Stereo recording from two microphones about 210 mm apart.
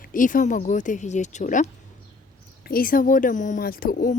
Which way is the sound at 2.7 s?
45° left (ahead or behind).